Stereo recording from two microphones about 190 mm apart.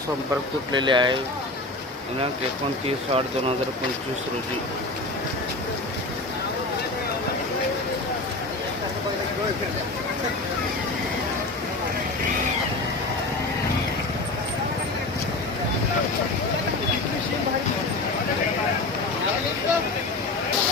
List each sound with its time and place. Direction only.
0.7 s speech: 25° right (ahead or behind)
2.8 s speech: 30° right (ahead or behind)